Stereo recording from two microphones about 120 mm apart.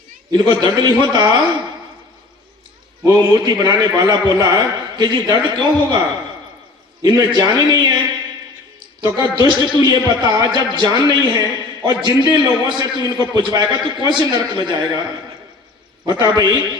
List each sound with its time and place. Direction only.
0.3 s a man's voice: 40° right (ahead or behind)
3.1 s a man's voice: 35° right (ahead or behind)
7.0 s a man's voice: 35° right (ahead or behind)
9.5 s a man's voice: 40° left (ahead or behind)
9.8 s a man's voice: 35° right (ahead or behind)
16.0 s a man's voice: 35° right (ahead or behind)